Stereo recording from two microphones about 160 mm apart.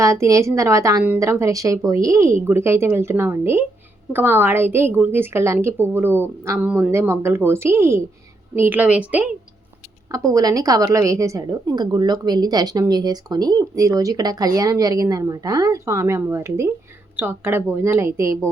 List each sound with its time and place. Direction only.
0.0 s a woman's voice: 20° right (ahead or behind)
10.1 s a woman's voice: 20° right (ahead or behind)